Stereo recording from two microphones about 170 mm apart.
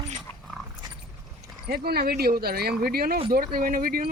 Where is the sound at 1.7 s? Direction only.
65° right (ahead or behind).